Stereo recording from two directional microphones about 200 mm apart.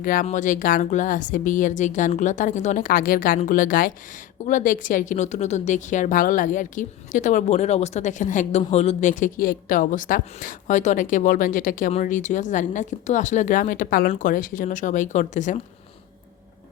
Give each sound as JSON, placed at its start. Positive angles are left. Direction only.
{"t": 0.0, "sound": "a woman's voice", "side_deg": 45}